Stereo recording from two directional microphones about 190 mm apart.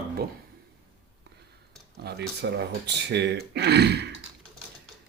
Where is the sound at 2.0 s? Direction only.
60° right (ahead or behind).